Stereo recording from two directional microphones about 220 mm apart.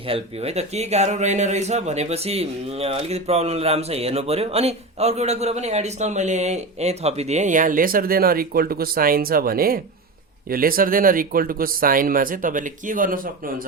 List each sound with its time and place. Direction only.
0.1 s speech: 30° right (ahead or behind)